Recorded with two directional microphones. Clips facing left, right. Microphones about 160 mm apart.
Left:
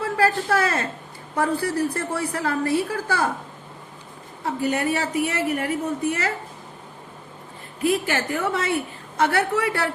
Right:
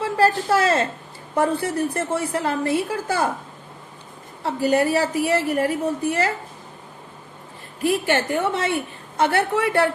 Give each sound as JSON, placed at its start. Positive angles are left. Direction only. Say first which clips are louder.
{"t": 0.0, "sound": "a sound", "louder": "right 2 dB", "side_deg": -25}
{"t": 1.4, "sound": "a woman's voice", "louder": "right 2 dB", "side_deg": -25}
{"t": 4.6, "sound": "a woman's voice", "louder": "right 5 dB", "side_deg": -30}
{"t": 7.9, "sound": "a woman's voice", "louder": "right 2 dB", "side_deg": -30}